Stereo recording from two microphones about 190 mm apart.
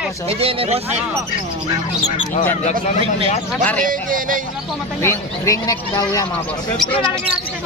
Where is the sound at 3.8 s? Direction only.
45° right (ahead or behind).